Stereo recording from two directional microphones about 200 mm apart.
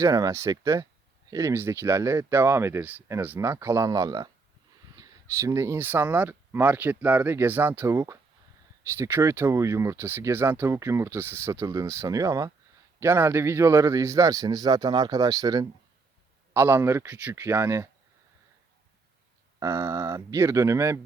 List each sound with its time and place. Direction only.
0.0 s speech: 15° right (ahead or behind)
19.5 s speech: 15° right (ahead or behind)